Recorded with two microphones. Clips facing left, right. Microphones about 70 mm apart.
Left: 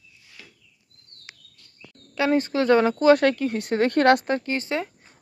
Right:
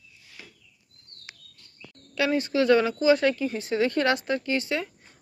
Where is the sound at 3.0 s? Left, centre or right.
Left.